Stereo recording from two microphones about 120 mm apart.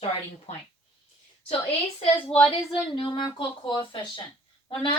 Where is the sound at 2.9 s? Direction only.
45° left (ahead or behind).